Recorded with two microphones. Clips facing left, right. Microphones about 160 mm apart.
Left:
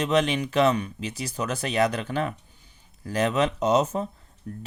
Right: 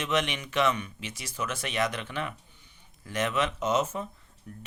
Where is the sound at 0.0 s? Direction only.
35° left (ahead or behind).